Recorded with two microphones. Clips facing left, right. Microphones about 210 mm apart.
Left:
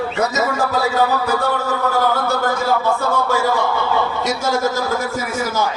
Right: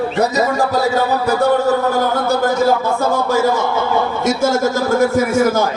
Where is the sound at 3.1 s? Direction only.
40° right (ahead or behind).